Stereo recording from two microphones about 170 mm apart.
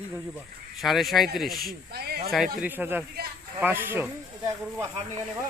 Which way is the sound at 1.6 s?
65° right (ahead or behind).